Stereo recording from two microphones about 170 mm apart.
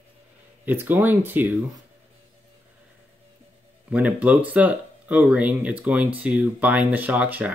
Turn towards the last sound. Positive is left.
turn(degrees=-10)  # may be behind; listen again after turning